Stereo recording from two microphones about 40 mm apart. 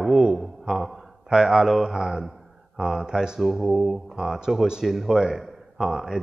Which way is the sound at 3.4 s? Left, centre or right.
Centre.